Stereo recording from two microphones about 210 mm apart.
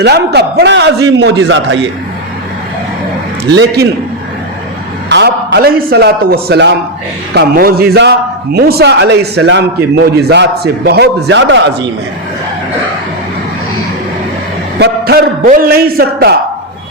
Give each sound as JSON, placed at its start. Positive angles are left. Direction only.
{"t": 0.0, "sound": "a man's voice", "side_deg": -50}
{"t": 3.5, "sound": "a man's voice", "side_deg": -55}
{"t": 5.0, "sound": "a man's voice", "side_deg": -55}
{"t": 14.8, "sound": "a man's voice", "side_deg": -45}